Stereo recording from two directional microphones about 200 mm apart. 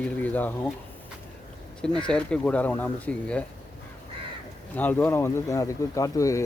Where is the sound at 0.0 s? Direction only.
10° left (ahead or behind).